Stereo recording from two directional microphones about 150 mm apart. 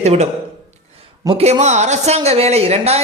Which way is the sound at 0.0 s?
50° right (ahead or behind).